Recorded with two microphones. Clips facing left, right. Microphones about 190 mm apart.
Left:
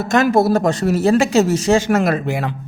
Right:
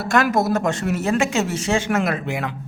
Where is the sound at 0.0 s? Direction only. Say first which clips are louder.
Left 5 dB; 20° left (ahead or behind).